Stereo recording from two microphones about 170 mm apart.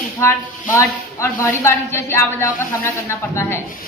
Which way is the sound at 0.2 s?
15° left (ahead or behind).